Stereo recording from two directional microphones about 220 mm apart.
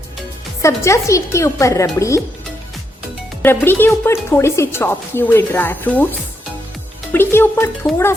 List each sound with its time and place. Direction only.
0.6 s speech: 15° left (ahead or behind)
3.4 s speech: 10° left (ahead or behind)